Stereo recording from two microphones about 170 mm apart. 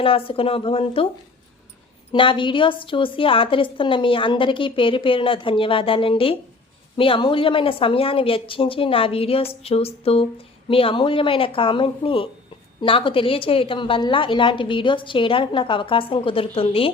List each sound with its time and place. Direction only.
0.0 s a woman's voice: 35° left (ahead or behind)
2.1 s a woman's voice: 30° left (ahead or behind)